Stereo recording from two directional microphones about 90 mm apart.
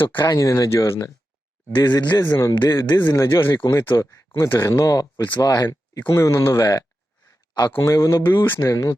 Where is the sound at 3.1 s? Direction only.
35° left (ahead or behind).